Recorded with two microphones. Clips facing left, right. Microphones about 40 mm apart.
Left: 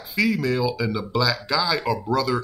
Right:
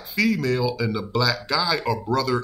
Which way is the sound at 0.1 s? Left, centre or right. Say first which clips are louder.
Even; centre.